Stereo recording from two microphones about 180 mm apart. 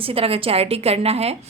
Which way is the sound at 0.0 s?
30° right (ahead or behind).